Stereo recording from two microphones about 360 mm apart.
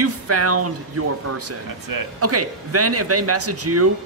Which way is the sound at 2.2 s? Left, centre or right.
Right.